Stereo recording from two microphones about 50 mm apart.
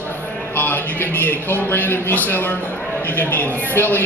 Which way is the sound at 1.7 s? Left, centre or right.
Left.